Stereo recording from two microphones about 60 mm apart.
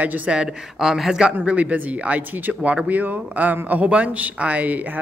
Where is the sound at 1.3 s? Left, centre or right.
Right.